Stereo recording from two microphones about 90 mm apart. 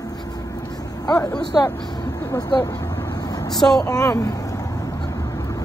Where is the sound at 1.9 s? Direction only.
50° left (ahead or behind).